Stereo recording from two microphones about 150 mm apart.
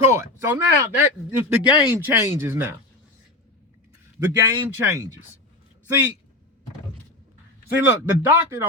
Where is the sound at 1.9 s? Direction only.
15° right (ahead or behind).